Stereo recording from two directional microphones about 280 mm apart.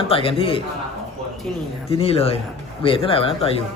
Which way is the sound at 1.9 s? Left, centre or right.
Left.